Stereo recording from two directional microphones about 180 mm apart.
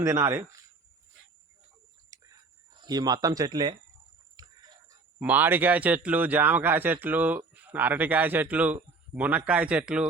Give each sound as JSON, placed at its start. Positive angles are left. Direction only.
{"t": 0.0, "sound": "speech", "side_deg": -15}
{"t": 2.0, "sound": "whispering", "side_deg": -20}
{"t": 2.8, "sound": "speech", "side_deg": -20}
{"t": 4.4, "sound": "a sound", "side_deg": -20}
{"t": 5.2, "sound": "speech", "side_deg": -10}